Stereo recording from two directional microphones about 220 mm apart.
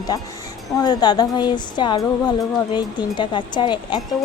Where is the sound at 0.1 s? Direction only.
15° left (ahead or behind).